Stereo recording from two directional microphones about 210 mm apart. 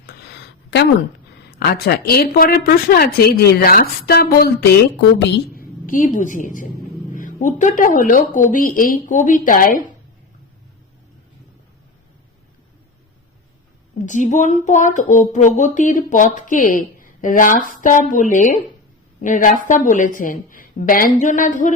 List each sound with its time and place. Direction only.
0.0 s a sound: 50° left (ahead or behind)
1.5 s a woman's voice: 50° left (ahead or behind)
5.5 s a woman's voice: 40° left (ahead or behind)
14.0 s speech: 35° left (ahead or behind)